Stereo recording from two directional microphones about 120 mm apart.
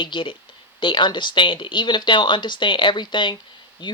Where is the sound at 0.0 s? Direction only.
45° left (ahead or behind).